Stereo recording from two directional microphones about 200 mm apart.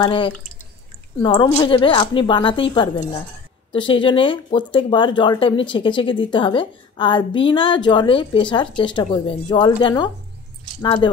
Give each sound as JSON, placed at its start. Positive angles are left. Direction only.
{"t": 0.0, "sound": "speech", "side_deg": 25}